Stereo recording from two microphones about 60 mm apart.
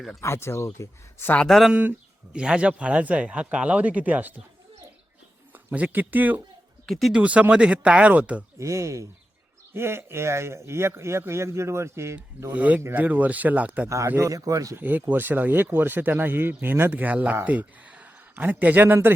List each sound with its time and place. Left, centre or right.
0.2 s speech: left
1.5 s speech: centre
1.7 s speech: right
5.7 s speech: right
6.8 s speech: centre
7.2 s speech: right
8.5 s speech: right
9.7 s speech: right
12.5 s speech: right
13.8 s speech: right
14.3 s speech: right
14.8 s speech: right